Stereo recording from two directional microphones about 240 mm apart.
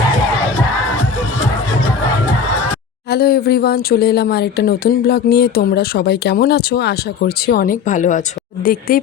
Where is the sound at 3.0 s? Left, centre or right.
Left.